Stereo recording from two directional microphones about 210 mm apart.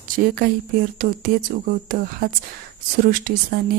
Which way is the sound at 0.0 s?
45° right (ahead or behind).